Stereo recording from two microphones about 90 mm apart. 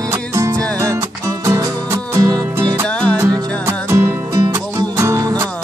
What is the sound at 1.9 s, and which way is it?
Music, 30° right (ahead or behind).